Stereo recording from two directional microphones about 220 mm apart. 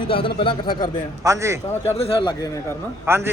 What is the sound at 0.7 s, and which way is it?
Speech, 40° left (ahead or behind).